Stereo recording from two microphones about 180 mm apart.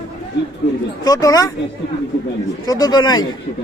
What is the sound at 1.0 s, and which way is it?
Speech, 20° left (ahead or behind).